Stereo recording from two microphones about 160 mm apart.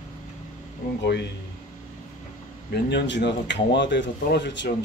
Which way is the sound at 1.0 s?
90° left.